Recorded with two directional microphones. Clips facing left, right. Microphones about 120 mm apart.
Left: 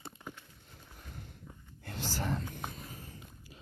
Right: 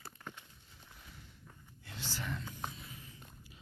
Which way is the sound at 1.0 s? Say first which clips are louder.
Left 9 dB; 50° left (ahead or behind).